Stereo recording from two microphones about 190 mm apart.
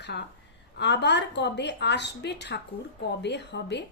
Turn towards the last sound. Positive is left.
turn(degrees=65)  # may be behind; listen again after turning